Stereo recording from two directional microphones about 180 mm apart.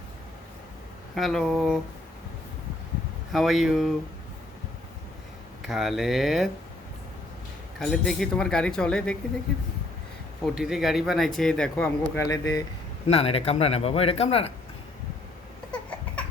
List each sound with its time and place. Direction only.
1.1 s speech: centre (ahead or behind)
3.3 s speech: centre (ahead or behind)
5.6 s speech: centre (ahead or behind)
7.8 s speech: centre (ahead or behind)
10.4 s speech: 5° right (ahead or behind); by 12.6 s 20° left (ahead or behind)
13.1 s speech: 35° left (ahead or behind)